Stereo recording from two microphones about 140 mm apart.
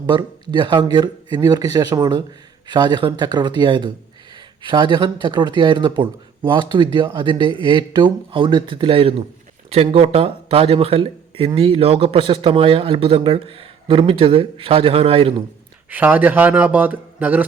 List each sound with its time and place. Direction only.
0.0 s speech: 30° right (ahead or behind)
15.9 s speech: 10° right (ahead or behind)